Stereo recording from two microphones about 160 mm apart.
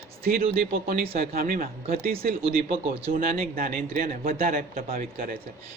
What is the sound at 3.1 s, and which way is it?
A man's voice, 65° right (ahead or behind).